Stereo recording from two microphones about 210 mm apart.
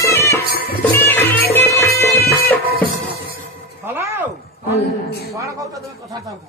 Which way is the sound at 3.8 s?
10° right (ahead or behind).